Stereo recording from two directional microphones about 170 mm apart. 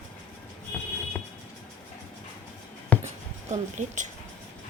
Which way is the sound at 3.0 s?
45° right (ahead or behind).